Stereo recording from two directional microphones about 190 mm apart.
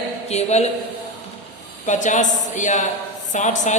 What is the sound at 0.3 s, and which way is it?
Speech, 35° left (ahead or behind).